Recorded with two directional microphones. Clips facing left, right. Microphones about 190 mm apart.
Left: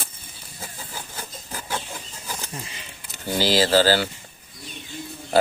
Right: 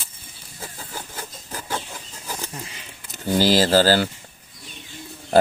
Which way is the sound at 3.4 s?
45° right (ahead or behind).